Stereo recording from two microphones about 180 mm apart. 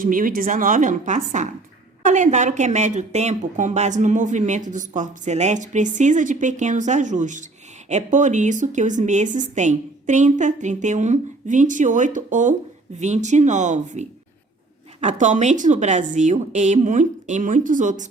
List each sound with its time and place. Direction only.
0.0 s a woman's voice: 50° right (ahead or behind)